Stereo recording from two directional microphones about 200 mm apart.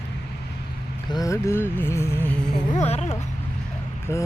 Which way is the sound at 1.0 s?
20° left (ahead or behind).